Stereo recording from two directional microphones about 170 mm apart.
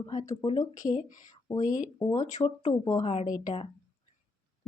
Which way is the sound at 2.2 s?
45° left (ahead or behind).